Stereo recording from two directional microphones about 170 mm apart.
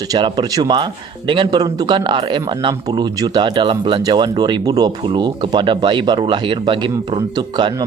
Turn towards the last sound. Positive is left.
turn(degrees=-25)  # may be behind; listen again after turning